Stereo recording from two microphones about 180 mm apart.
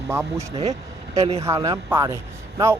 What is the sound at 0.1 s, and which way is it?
Speech, 15° right (ahead or behind).